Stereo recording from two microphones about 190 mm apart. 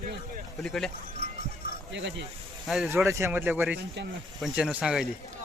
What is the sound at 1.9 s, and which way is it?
Speech, 70° right (ahead or behind).